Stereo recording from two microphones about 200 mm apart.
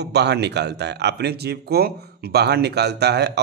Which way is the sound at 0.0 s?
60° right (ahead or behind).